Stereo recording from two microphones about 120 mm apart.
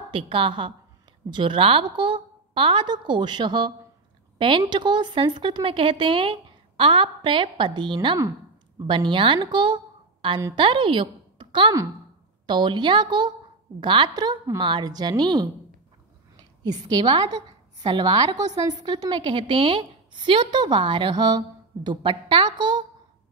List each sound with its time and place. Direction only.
0.1 s a woman's voice: 45° right (ahead or behind)
16.6 s a woman's voice: 35° right (ahead or behind)